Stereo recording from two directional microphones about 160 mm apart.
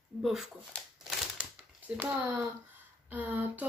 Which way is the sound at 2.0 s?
10° right (ahead or behind).